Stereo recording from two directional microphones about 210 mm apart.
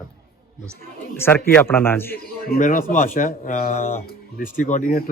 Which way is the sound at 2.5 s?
40° left (ahead or behind).